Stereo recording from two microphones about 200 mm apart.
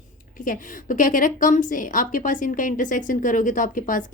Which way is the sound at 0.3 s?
40° left (ahead or behind).